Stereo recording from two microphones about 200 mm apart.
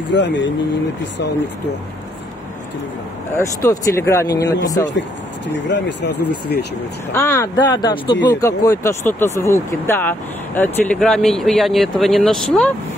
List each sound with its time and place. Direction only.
0.1 s speech: 60° left (ahead or behind)
3.3 s speech: 15° left (ahead or behind)
5.5 s speech: 60° left (ahead or behind)
7.1 s speech: 15° left (ahead or behind)